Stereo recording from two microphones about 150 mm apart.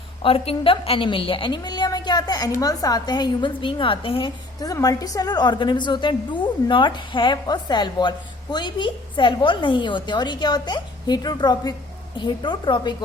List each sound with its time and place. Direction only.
0.2 s a woman's voice: 40° left (ahead or behind)
4.6 s a woman's voice: 25° left (ahead or behind)